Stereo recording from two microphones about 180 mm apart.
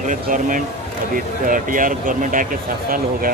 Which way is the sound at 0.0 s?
45° right (ahead or behind).